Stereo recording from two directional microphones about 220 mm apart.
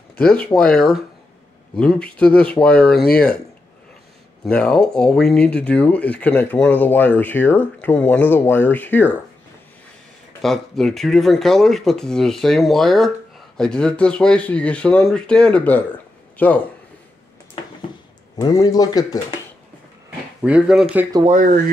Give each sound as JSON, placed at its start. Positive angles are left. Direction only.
{"t": 0.4, "sound": "speech", "side_deg": 5}
{"t": 4.5, "sound": "speech", "side_deg": 5}
{"t": 10.4, "sound": "speech", "side_deg": 0}
{"t": 18.4, "sound": "speech", "side_deg": 15}
{"t": 20.4, "sound": "speech", "side_deg": -5}
{"t": 21.2, "sound": "speech", "side_deg": -35}